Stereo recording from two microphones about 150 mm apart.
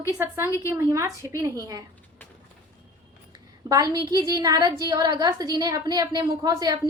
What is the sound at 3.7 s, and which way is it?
A woman's voice, 25° right (ahead or behind).